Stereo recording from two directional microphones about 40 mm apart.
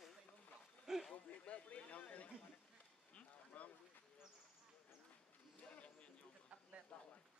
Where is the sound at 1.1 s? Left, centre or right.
Left.